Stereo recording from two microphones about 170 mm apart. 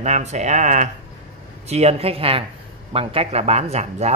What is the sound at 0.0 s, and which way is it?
Speech, 40° right (ahead or behind).